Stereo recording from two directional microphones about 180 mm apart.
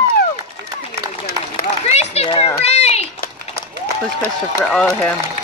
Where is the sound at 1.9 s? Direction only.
35° left (ahead or behind).